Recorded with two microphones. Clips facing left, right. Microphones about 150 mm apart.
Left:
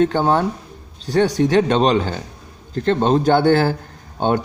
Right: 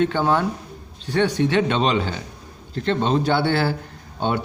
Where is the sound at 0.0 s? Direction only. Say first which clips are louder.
Left 3 dB; 40° left (ahead or behind).